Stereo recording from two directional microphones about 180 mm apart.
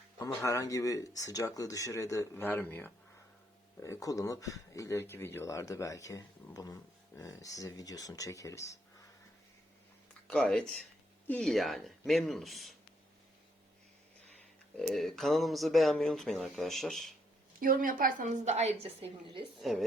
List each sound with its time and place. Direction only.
0.2 s speech: 15° left (ahead or behind)
10.2 s speech: 5° left (ahead or behind)
14.8 s speech: centre (ahead or behind)
17.6 s a woman's voice: 50° right (ahead or behind); by 19.5 s 30° right (ahead or behind)
19.5 s speech: centre (ahead or behind)